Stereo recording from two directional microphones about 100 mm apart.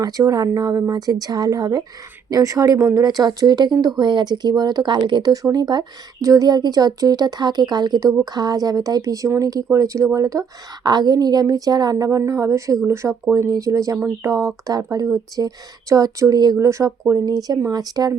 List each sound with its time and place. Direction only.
0.0 s a woman's voice: 35° right (ahead or behind)
10.8 s a woman's voice: 45° right (ahead or behind)